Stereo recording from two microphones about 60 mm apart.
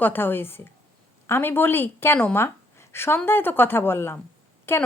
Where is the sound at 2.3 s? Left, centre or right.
Left.